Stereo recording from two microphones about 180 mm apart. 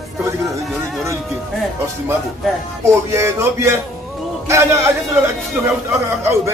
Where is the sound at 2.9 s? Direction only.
15° right (ahead or behind).